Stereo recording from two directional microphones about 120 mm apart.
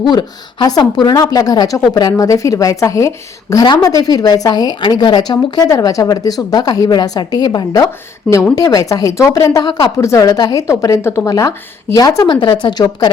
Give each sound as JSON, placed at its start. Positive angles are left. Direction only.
{"t": 0.0, "sound": "a woman's voice", "side_deg": 35}
{"t": 12.2, "sound": "a woman's voice", "side_deg": 45}